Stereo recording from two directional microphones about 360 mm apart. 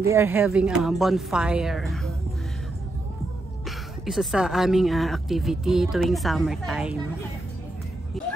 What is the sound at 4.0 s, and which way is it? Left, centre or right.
Speech, centre.